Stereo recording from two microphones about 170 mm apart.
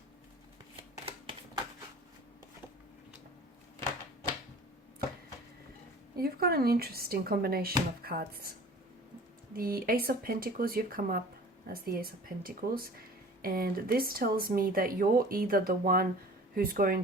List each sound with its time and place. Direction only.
6.1 s speech: 65° right (ahead or behind)